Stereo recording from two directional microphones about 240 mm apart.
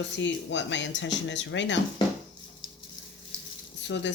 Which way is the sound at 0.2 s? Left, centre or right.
Left.